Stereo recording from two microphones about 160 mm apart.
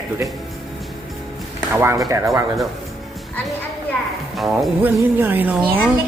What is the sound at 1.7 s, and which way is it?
Speech, 15° right (ahead or behind).